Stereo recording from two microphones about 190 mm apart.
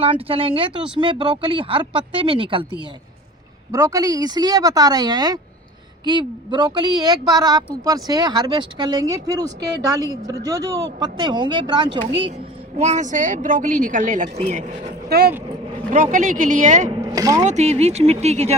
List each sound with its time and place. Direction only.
0.0 s a man's voice: 30° right (ahead or behind)
3.7 s a man's voice: 15° right (ahead or behind)
12.7 s a woman's voice: 35° right (ahead or behind)
16.1 s a woman's voice: 45° right (ahead or behind)
16.9 s speech: 20° right (ahead or behind)
17.4 s a woman's voice: 35° right (ahead or behind)